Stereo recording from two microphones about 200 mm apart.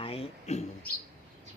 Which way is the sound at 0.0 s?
30° left (ahead or behind).